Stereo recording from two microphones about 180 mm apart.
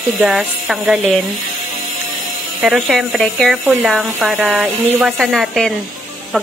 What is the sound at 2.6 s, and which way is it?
Speech, centre (ahead or behind).